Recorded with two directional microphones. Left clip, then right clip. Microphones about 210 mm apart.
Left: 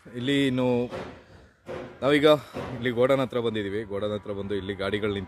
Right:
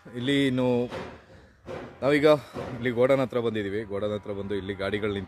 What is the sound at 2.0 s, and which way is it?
Speech, 5° left (ahead or behind).